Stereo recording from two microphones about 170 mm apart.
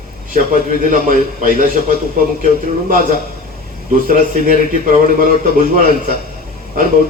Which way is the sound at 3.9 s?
55° right (ahead or behind).